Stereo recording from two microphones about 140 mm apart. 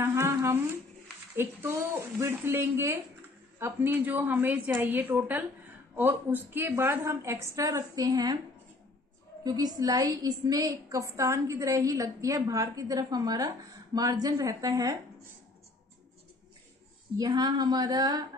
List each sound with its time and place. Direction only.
0.0 s a woman's voice: 20° right (ahead or behind)
9.4 s a woman's voice: 30° right (ahead or behind)
17.2 s a woman's voice: 30° right (ahead or behind)